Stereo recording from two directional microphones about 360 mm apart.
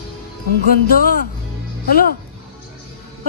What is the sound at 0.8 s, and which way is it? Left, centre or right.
Speech, left.